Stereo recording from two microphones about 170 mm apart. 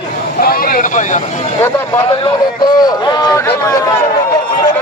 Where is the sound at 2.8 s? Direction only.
25° left (ahead or behind).